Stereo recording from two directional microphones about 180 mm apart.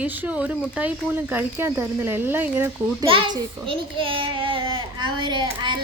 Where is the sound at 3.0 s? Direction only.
30° right (ahead or behind).